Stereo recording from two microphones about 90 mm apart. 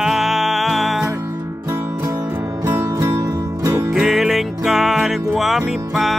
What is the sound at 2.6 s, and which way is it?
Music, 30° right (ahead or behind).